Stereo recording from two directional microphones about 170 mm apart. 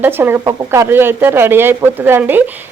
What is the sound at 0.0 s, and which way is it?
Speech, 15° right (ahead or behind).